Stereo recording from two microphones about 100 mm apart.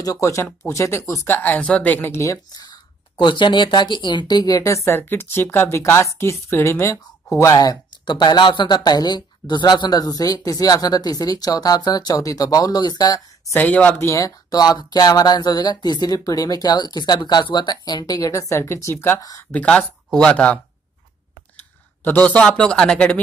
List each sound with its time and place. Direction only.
0.0 s speech: 35° left (ahead or behind)
1.2 s speech: 20° left (ahead or behind)
2.7 s speech: 55° left (ahead or behind); by 7.8 s 35° left (ahead or behind)
8.0 s speech: 50° left (ahead or behind)
13.5 s speech: 15° left (ahead or behind)
14.0 s speech: 30° left (ahead or behind)
19.5 s speech: 10° left (ahead or behind)
22.0 s speech: 15° left (ahead or behind)